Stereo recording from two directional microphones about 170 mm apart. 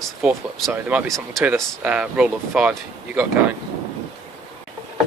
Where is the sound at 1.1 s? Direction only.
Centre (ahead or behind).